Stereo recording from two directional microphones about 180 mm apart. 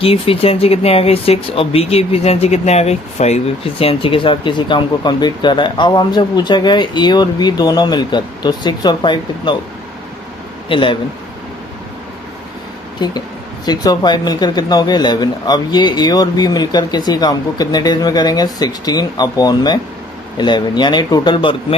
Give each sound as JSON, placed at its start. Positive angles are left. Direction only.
{"t": 0.0, "sound": "speech", "side_deg": 30}
{"t": 10.7, "sound": "speech", "side_deg": 30}
{"t": 13.0, "sound": "speech", "side_deg": 25}